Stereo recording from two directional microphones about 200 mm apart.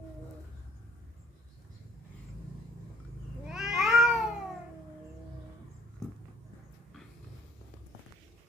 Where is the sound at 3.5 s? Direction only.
Centre (ahead or behind).